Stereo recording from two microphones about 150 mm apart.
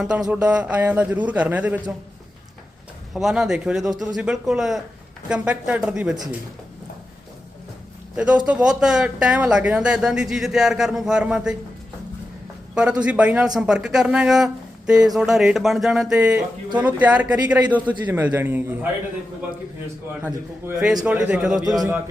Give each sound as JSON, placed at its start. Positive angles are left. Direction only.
{"t": 0.0, "sound": "a man's voice", "side_deg": -5}
{"t": 3.1, "sound": "a man's voice", "side_deg": 0}
{"t": 8.1, "sound": "speech", "side_deg": -5}
{"t": 12.7, "sound": "a man's voice", "side_deg": -5}
{"t": 20.2, "sound": "speech", "side_deg": -5}